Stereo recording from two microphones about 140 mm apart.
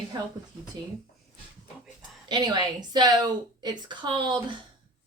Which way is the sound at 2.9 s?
30° right (ahead or behind).